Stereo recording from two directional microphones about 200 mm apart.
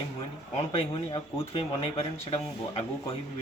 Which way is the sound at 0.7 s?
30° left (ahead or behind).